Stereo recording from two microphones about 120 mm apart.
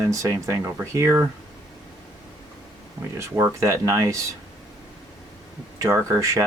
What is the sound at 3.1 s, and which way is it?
Speech, 20° right (ahead or behind).